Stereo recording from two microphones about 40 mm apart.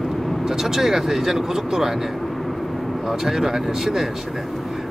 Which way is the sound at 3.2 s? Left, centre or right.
Centre.